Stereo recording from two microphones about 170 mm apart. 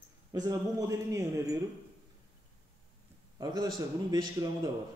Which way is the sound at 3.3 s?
25° right (ahead or behind).